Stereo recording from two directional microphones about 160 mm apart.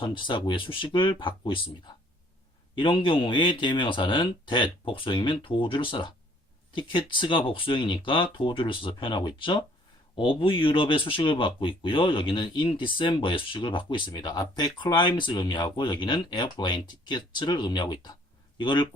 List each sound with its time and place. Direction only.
0.0 s a man's voice: 30° left (ahead or behind)
2.7 s a man's voice: 30° left (ahead or behind)